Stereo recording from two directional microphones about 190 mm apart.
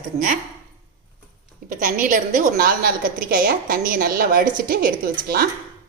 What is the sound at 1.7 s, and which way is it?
A woman's voice, 45° right (ahead or behind).